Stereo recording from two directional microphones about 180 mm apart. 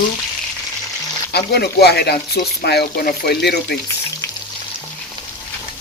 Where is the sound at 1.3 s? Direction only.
65° left (ahead or behind).